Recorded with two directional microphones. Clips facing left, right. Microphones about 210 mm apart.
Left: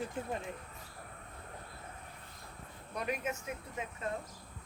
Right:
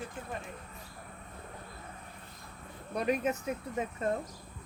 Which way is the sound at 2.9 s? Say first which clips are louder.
Right 7 dB; 35° right (ahead or behind).